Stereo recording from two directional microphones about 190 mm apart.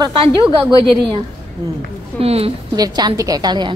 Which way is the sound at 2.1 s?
30° right (ahead or behind).